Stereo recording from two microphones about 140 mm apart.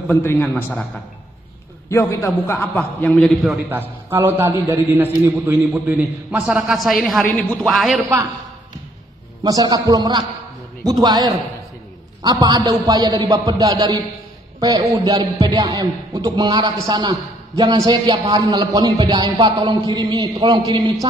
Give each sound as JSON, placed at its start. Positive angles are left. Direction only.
{"t": 0.1, "sound": "a man's voice", "side_deg": 15}
{"t": 1.9, "sound": "a man's voice", "side_deg": 20}
{"t": 3.4, "sound": "a man's voice", "side_deg": -10}
{"t": 5.9, "sound": "a man's voice", "side_deg": -10}
{"t": 9.4, "sound": "speech", "side_deg": -25}